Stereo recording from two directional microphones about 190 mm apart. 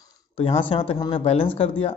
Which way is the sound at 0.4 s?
30° left (ahead or behind).